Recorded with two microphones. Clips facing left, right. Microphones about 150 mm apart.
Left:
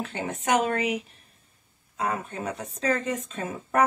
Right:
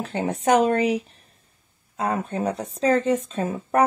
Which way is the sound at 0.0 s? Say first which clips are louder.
Right 7 dB; 40° right (ahead or behind).